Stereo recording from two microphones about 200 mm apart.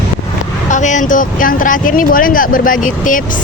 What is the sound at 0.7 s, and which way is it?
Speech, 40° left (ahead or behind).